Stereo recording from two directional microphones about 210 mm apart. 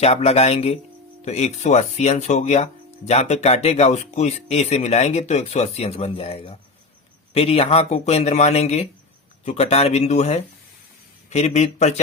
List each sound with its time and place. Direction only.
0.0 s speech: 30° left (ahead or behind)